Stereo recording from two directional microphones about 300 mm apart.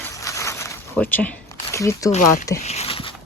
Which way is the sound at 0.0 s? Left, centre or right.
Centre.